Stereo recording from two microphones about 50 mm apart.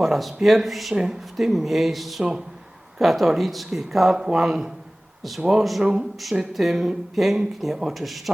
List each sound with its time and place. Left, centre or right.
0.0 s speech: centre
0.9 s speech: centre
1.4 s speech: centre
6.5 s speech: centre